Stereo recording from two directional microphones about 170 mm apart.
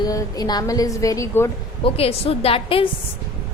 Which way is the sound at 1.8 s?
35° left (ahead or behind).